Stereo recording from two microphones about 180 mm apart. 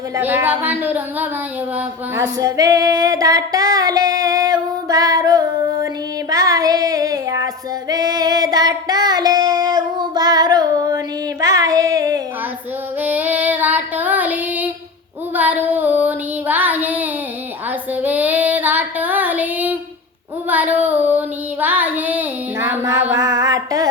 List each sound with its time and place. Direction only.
0.2 s speech: 10° right (ahead or behind)
1.7 s female singing: 20° right (ahead or behind)
13.0 s child singing: 10° right (ahead or behind)
15.4 s female singing: 10° right (ahead or behind)